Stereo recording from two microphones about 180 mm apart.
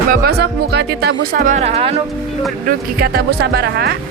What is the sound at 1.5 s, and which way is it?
Speech, 35° right (ahead or behind).